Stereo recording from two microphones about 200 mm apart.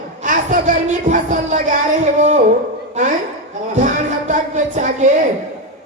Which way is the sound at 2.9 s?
35° right (ahead or behind).